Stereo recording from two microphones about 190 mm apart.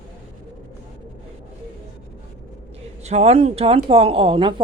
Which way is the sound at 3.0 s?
35° right (ahead or behind).